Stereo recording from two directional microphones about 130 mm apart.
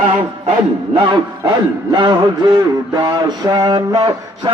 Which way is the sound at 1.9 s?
35° right (ahead or behind).